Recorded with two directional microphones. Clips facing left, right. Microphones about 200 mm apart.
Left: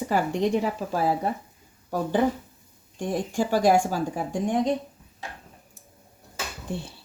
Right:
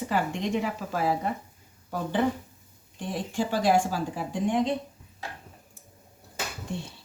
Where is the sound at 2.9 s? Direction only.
45° left (ahead or behind).